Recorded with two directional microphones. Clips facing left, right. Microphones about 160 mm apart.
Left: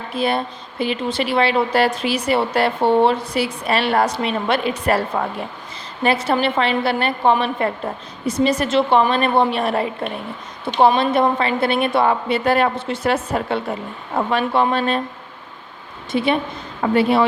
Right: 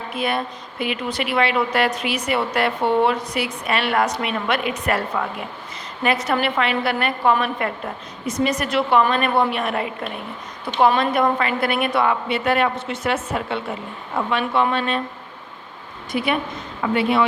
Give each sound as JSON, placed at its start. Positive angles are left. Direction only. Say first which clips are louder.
{"t": 0.1, "sound": "a woman's voice", "louder": "left 4 dB", "side_deg": 30}
{"t": 16.1, "sound": "a woman's voice", "louder": "left 3 dB", "side_deg": 30}